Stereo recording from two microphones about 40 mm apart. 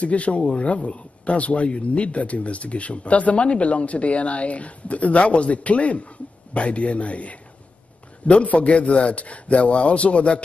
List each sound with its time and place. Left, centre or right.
0.0 s speech: left